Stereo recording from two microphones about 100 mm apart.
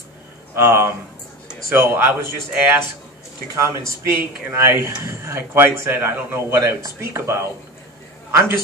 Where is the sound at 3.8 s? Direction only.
30° right (ahead or behind).